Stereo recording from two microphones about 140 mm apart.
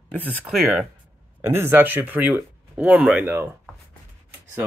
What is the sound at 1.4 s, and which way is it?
Speech, 15° right (ahead or behind).